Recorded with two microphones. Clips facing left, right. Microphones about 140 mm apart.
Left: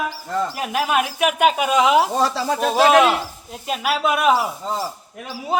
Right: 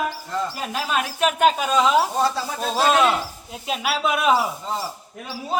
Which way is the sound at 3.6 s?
Centre (ahead or behind).